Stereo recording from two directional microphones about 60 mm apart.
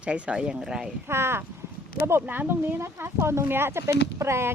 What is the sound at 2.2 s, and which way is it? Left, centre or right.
Speech, right.